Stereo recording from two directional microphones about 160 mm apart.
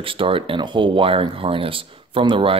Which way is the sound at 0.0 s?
35° right (ahead or behind).